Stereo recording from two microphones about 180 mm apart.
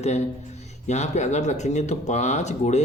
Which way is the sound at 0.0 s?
40° left (ahead or behind).